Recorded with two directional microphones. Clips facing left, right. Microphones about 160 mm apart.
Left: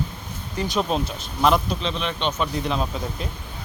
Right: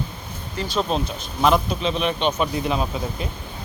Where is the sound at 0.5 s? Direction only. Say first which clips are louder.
Even; 15° left (ahead or behind).